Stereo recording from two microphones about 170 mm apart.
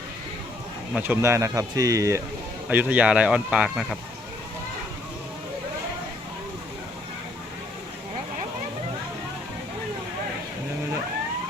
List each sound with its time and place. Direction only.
0.9 s speech: 10° right (ahead or behind)